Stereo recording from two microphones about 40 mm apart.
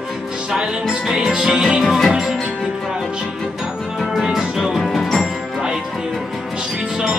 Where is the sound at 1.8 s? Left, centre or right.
Centre.